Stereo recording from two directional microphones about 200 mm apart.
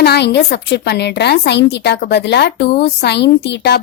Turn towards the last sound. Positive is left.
turn(degrees=60)  # may be behind; listen again after turning